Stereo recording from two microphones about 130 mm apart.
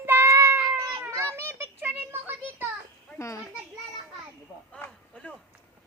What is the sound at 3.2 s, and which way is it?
Children playing, 25° left (ahead or behind).